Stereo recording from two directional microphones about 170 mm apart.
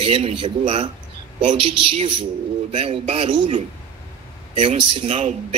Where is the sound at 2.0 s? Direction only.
30° right (ahead or behind).